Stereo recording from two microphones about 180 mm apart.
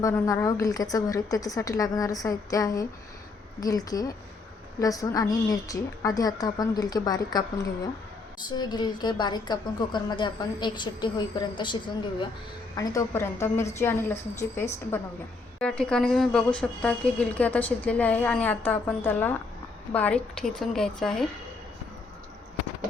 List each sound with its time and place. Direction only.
0.0 s a woman's voice: 15° left (ahead or behind)